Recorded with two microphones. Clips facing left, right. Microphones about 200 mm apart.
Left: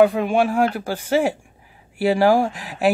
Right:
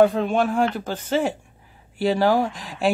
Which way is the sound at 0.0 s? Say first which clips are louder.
Left 2 dB; 10° left (ahead or behind).